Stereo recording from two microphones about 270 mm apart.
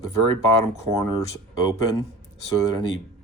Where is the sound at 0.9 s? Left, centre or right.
Right.